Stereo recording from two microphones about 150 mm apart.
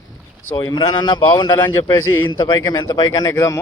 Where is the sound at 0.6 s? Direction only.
30° left (ahead or behind).